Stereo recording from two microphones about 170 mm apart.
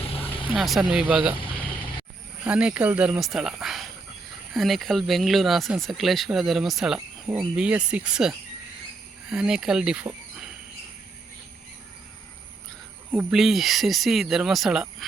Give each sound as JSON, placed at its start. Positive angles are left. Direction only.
{"t": 0.0, "sound": "vehicle", "side_deg": 35}
{"t": 0.5, "sound": "speech", "side_deg": 0}
{"t": 2.4, "sound": "speech", "side_deg": -5}
{"t": 13.1, "sound": "speech", "side_deg": -5}